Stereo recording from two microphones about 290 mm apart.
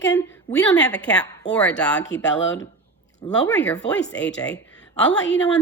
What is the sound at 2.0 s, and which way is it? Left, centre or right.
Speech, left.